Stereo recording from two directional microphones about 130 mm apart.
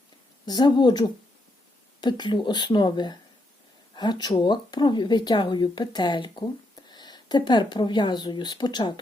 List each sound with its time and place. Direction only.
0.4 s speech: 35° left (ahead or behind)